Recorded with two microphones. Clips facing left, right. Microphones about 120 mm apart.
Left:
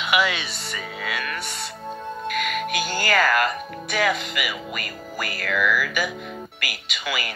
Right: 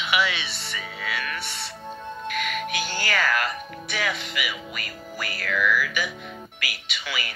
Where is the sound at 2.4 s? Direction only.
45° left (ahead or behind).